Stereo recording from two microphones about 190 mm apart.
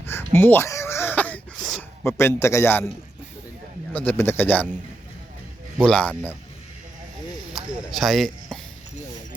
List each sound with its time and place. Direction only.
0.0 s a sound: 10° left (ahead or behind)
2.0 s a man's voice: 15° left (ahead or behind)
3.9 s a man's voice: 10° left (ahead or behind)
5.7 s speech: 5° left (ahead or behind)
7.5 s speech: centre (ahead or behind)